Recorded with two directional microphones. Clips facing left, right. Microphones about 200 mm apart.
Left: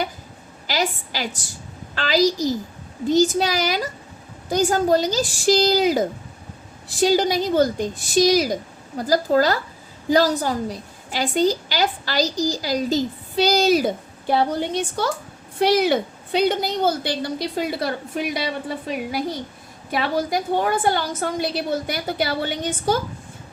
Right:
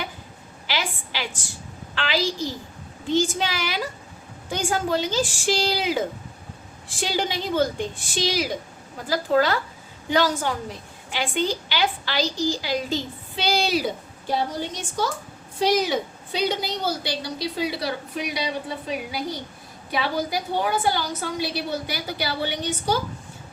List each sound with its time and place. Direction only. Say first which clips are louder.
0.7 s a woman's voice: left 5 dB; 40° left (ahead or behind)
20.0 s a woman's voice: left 3 dB; 50° left (ahead or behind)